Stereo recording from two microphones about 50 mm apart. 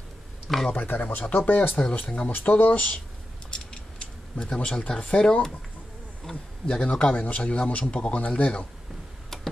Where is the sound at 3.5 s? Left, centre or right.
Left.